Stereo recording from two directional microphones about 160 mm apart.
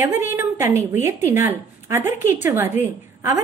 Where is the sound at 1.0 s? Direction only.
15° right (ahead or behind).